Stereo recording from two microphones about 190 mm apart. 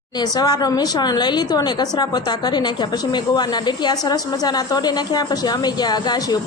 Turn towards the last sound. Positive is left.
turn(degrees=20)  # may be behind; listen again after turning